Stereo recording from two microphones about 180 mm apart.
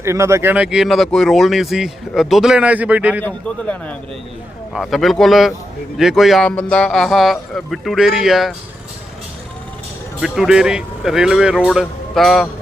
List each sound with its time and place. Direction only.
0.0 s speech: 15° right (ahead or behind)
3.2 s a man's voice: 10° left (ahead or behind)
10.2 s speech: centre (ahead or behind)